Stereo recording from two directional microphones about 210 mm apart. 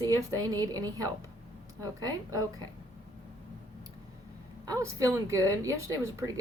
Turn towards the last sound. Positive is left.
turn(degrees=-15)  # may be behind; listen again after turning